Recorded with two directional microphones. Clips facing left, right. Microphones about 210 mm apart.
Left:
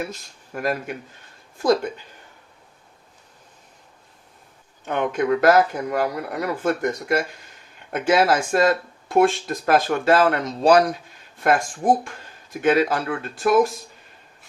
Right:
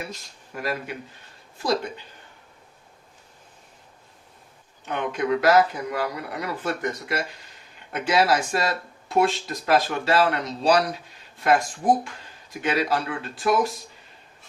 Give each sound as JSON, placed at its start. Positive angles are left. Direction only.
{"t": 0.5, "sound": "speech", "side_deg": 45}
{"t": 4.9, "sound": "speech", "side_deg": 50}
{"t": 12.6, "sound": "speech", "side_deg": 50}